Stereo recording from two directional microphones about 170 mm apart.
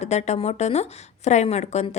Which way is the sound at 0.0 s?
40° left (ahead or behind).